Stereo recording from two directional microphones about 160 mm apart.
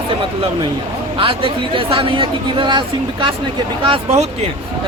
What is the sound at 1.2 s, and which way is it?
Speech, 35° right (ahead or behind).